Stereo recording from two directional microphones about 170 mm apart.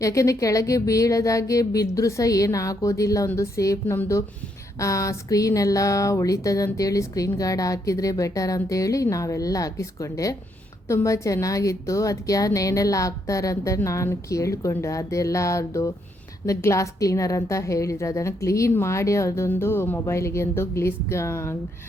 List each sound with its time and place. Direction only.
0.0 s a woman's voice: 20° left (ahead or behind)